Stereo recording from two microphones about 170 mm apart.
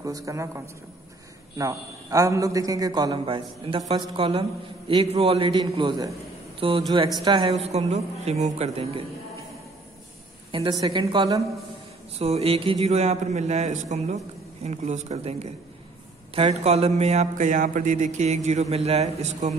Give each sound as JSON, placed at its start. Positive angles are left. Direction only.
{"t": 0.0, "sound": "a man's voice", "side_deg": -20}
{"t": 1.6, "sound": "a man's voice", "side_deg": -20}
{"t": 7.6, "sound": "speech", "side_deg": -40}
{"t": 10.5, "sound": "a man's voice", "side_deg": -25}
{"t": 12.2, "sound": "speech", "side_deg": -35}